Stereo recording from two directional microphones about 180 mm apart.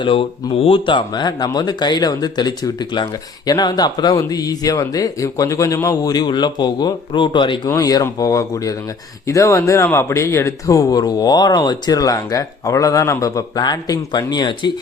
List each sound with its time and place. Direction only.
0.0 s speech: 30° left (ahead or behind)